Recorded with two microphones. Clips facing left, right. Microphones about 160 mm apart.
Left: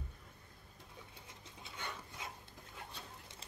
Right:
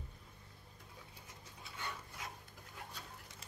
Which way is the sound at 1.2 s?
25° left (ahead or behind).